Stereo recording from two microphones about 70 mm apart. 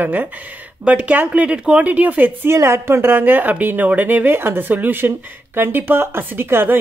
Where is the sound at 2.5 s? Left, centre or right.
Right.